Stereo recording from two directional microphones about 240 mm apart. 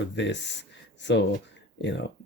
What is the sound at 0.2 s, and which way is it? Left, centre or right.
Speech, left.